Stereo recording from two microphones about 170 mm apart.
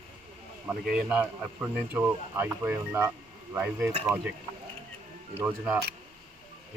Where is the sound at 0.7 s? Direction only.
5° right (ahead or behind).